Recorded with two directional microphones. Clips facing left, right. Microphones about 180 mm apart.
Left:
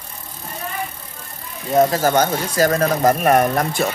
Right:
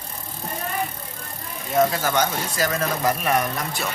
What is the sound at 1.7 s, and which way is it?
Speech, 40° left (ahead or behind).